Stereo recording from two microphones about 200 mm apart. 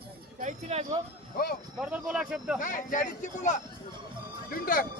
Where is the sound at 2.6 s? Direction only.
40° left (ahead or behind).